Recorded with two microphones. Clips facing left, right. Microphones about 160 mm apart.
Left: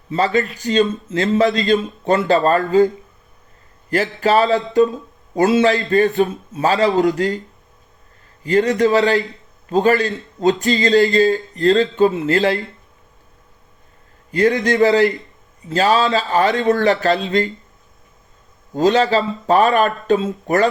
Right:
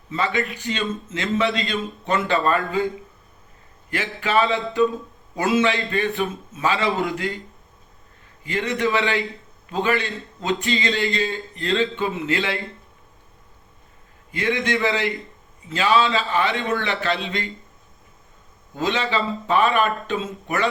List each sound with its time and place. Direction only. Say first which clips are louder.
0.1 s speech: left 6 dB; 40° left (ahead or behind)
8.4 s speech: left 8 dB; 40° left (ahead or behind)
14.3 s speech: left 8 dB; 40° left (ahead or behind)
18.7 s speech: left 9 dB; 40° left (ahead or behind)